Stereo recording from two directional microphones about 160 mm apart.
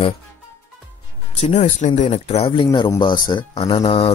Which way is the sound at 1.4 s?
40° left (ahead or behind).